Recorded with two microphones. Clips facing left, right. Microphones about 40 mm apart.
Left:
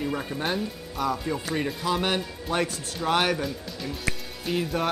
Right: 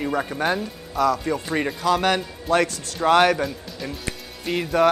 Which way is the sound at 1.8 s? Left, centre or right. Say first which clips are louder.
Right 7 dB; right.